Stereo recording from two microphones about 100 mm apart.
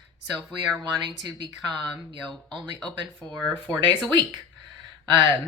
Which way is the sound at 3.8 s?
50° right (ahead or behind).